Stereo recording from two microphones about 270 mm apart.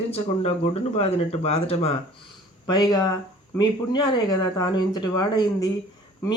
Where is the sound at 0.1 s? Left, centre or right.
Left.